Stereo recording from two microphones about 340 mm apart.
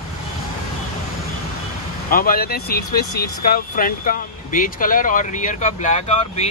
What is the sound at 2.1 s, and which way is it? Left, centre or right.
Speech, left.